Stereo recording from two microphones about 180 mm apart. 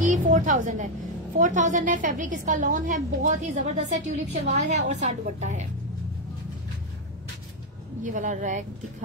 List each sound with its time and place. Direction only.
0.0 s a sound: 45° right (ahead or behind)
1.4 s a woman's voice: 45° right (ahead or behind)
8.0 s a woman's voice: 45° right (ahead or behind)